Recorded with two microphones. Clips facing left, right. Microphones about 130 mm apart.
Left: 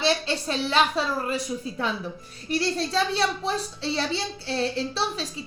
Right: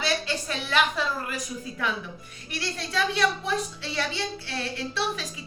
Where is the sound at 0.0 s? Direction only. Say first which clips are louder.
Left 4 dB; 30° left (ahead or behind).